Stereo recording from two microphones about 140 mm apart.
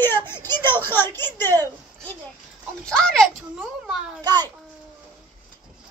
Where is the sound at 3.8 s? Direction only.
5° right (ahead or behind).